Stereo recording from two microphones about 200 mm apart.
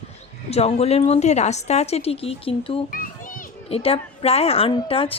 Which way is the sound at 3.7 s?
30° left (ahead or behind).